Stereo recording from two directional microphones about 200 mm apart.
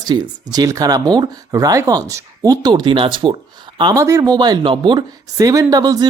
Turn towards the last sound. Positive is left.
turn(degrees=-20)  # may be behind; listen again after turning